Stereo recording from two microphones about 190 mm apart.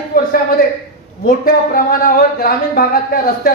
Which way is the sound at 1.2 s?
50° left (ahead or behind).